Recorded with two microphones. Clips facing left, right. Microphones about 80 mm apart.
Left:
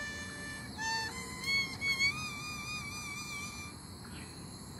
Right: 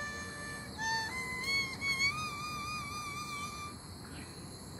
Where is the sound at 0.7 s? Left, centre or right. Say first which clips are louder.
Right 2 dB; right.